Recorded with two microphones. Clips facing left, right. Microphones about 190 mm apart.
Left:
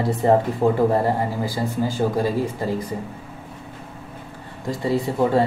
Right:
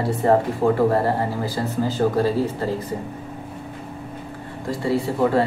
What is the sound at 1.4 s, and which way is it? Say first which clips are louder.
Speech: even; 10° left (ahead or behind).